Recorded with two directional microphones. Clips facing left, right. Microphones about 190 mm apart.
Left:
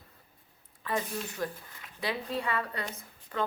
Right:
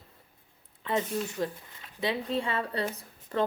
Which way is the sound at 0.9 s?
25° right (ahead or behind).